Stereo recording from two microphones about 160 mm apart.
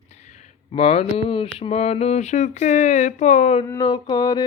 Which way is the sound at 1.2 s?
35° left (ahead or behind).